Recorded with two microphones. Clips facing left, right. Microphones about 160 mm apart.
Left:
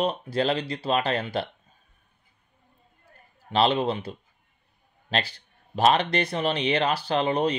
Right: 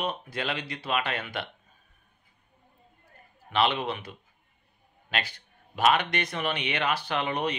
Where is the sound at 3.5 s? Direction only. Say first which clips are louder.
Left 4 dB; 30° left (ahead or behind).